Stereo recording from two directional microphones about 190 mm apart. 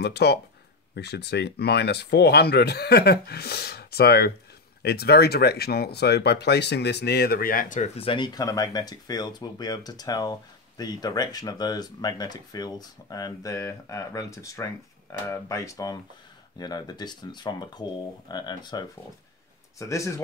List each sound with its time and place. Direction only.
0.0 s speech: 60° left (ahead or behind); by 7.9 s 45° left (ahead or behind)
8.0 s speech: 25° left (ahead or behind)